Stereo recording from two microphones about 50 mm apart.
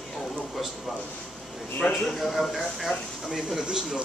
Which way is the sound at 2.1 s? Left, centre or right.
Centre.